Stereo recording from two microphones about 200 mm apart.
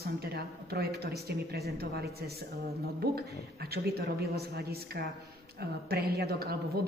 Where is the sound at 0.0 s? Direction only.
50° right (ahead or behind).